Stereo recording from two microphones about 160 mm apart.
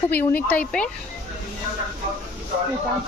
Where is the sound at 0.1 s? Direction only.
10° left (ahead or behind).